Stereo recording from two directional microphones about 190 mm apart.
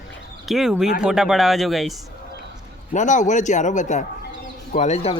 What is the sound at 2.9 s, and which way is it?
A man's voice, 40° left (ahead or behind).